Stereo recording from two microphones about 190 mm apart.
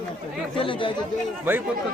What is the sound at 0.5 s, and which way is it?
Speech, 25° left (ahead or behind).